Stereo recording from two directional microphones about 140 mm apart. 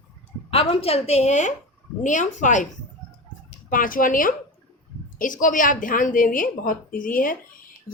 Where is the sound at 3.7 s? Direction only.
80° left.